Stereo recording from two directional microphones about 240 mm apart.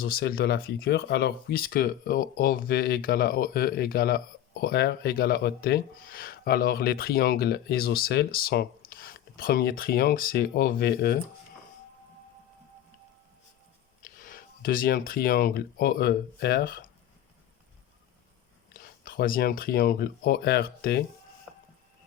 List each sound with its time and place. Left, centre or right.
0.0 s speech: left
14.2 s speech: left
18.7 s speech: left
21.5 s a sound: centre